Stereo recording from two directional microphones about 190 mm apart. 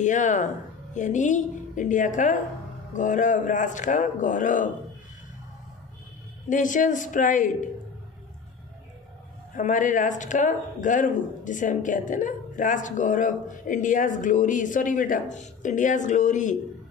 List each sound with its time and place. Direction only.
0.0 s a man's voice: 40° left (ahead or behind)
6.5 s speech: 40° left (ahead or behind)
9.6 s speech: 40° left (ahead or behind)